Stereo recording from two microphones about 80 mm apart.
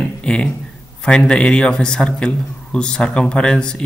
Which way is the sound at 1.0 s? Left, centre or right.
Centre.